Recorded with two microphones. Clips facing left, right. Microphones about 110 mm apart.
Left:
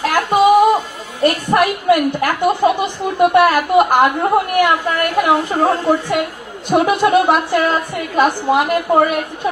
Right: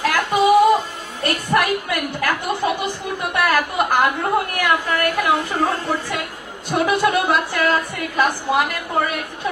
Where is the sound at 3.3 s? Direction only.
25° left (ahead or behind).